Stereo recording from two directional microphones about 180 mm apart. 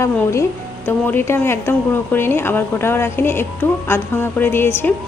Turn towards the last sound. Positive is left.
turn(degrees=15)  # may be behind; listen again after turning